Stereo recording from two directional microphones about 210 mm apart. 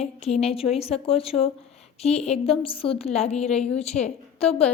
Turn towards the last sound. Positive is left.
turn(degrees=30)  # may be behind; listen again after turning